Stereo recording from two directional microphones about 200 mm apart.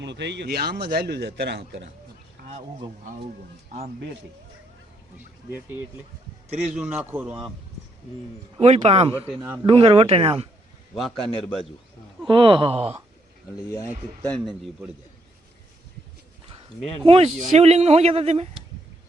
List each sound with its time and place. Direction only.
0.0 s a man's voice: 60° right (ahead or behind)
2.5 s speech: 35° right (ahead or behind)
5.5 s a man's voice: 10° right (ahead or behind)
8.5 s speech: 30° right (ahead or behind)
9.2 s a man's voice: 10° right (ahead or behind)
9.6 s speech: 25° right (ahead or behind)
11.2 s speech: centre (ahead or behind)
12.3 s speech: 25° right (ahead or behind)
14.2 s speech: 5° left (ahead or behind)
17.1 s speech: 30° right (ahead or behind)